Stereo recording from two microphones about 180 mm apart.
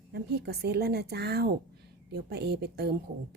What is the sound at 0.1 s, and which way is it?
Speech, 65° right (ahead or behind).